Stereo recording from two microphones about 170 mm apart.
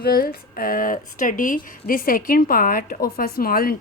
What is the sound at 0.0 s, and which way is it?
Speech, 60° left (ahead or behind).